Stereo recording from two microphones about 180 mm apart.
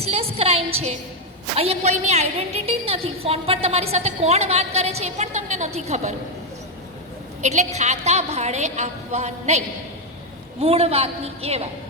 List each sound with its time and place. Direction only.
0.0 s a woman's voice: 35° right (ahead or behind)
7.4 s a woman's voice: 40° right (ahead or behind)